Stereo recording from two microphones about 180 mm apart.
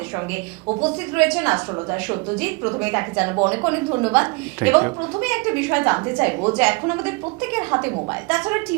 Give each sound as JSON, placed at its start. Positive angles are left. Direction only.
{"t": 0.7, "sound": "speech", "side_deg": -30}
{"t": 1.1, "sound": "a woman's voice", "side_deg": -10}
{"t": 4.1, "sound": "a woman's voice", "side_deg": -10}